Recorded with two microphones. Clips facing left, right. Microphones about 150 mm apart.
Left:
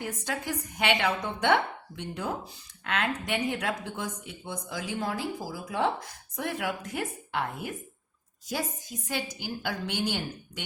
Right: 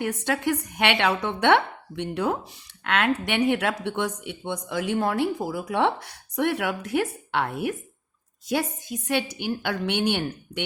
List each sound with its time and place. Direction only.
0.0 s speech: 65° right (ahead or behind)